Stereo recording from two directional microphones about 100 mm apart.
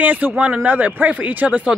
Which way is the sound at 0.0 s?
15° right (ahead or behind).